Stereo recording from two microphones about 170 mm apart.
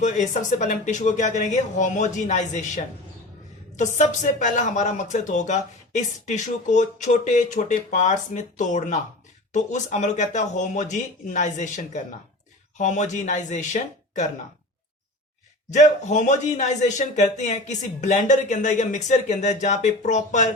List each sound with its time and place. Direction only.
0.6 s speech: 45° left (ahead or behind)
15.7 s speech: 45° left (ahead or behind)